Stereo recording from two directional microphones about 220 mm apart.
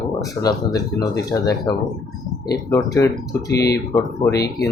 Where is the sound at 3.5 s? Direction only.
45° left (ahead or behind).